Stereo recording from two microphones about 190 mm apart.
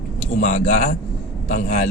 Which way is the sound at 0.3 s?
40° left (ahead or behind).